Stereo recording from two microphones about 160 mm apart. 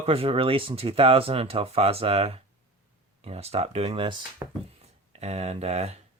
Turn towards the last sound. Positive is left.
turn(degrees=-40)  # may be behind; listen again after turning